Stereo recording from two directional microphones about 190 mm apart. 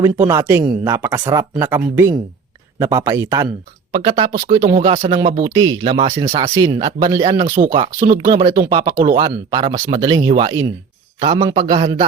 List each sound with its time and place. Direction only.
0.0 s speech: 15° right (ahead or behind)
3.9 s speech: 25° right (ahead or behind)
6.7 s speech: 25° right (ahead or behind)
8.0 s speech: 45° right (ahead or behind)
8.7 s speech: 25° right (ahead or behind)